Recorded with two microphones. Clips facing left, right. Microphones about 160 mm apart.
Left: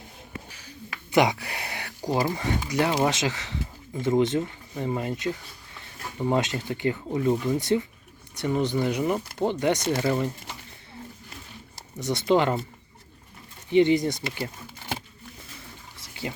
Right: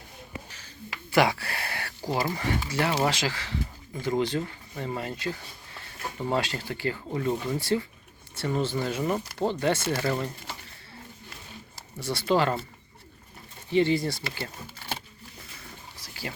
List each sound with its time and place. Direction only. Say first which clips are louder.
1.1 s speech: left 2 dB; 20° left (ahead or behind)
11.9 s speech: left 3 dB; 20° left (ahead or behind)
13.7 s speech: left 4 dB; 20° left (ahead or behind)
16.0 s water: left 4 dB; 20° left (ahead or behind)